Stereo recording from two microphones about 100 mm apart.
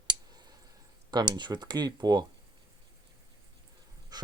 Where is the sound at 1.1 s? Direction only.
45° right (ahead or behind).